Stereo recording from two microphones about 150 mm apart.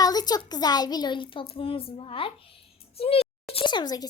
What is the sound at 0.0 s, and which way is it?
A child's voice, 25° left (ahead or behind).